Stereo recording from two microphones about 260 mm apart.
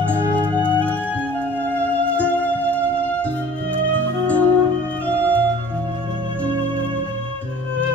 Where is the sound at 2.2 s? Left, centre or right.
Centre.